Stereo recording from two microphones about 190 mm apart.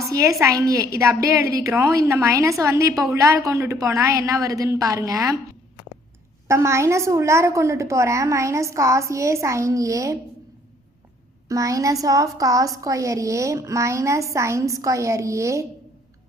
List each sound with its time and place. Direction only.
0.0 s a woman's voice: 15° right (ahead or behind)
6.5 s a woman's voice: 15° right (ahead or behind)
11.4 s a woman's voice: 15° right (ahead or behind)